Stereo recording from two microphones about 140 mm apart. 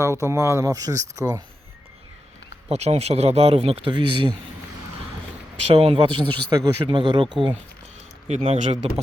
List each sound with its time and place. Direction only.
0.0 s speech: 20° right (ahead or behind)
2.6 s speech: 50° right (ahead or behind)
5.7 s speech: 45° right (ahead or behind)
8.3 s speech: 50° right (ahead or behind)